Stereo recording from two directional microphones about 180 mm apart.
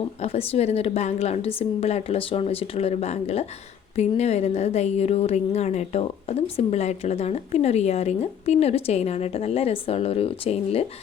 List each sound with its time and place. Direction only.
0.2 s a woman's voice: 35° left (ahead or behind)